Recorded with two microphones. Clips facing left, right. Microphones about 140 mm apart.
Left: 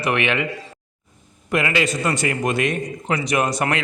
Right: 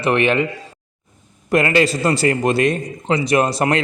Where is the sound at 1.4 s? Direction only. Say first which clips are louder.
Right 5 dB; 40° right (ahead or behind).